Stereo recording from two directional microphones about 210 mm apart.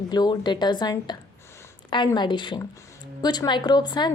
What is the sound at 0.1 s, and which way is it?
Speech, 20° left (ahead or behind).